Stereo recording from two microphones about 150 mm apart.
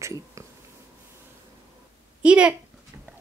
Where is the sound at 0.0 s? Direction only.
20° right (ahead or behind).